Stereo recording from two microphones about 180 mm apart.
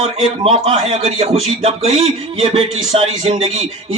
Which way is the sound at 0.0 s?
35° right (ahead or behind).